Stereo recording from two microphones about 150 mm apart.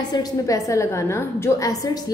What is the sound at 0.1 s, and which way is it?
A woman's voice, 25° left (ahead or behind).